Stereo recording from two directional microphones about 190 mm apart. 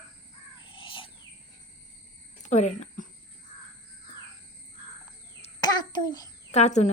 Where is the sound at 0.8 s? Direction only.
25° left (ahead or behind).